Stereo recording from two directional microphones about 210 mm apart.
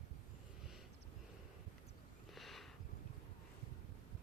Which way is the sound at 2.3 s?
Centre (ahead or behind).